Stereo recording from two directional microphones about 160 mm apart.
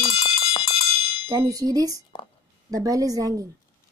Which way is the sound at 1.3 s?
20° right (ahead or behind).